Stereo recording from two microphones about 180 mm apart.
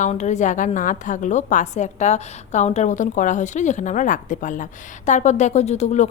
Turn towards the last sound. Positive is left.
turn(degrees=40)  # may be behind; listen again after turning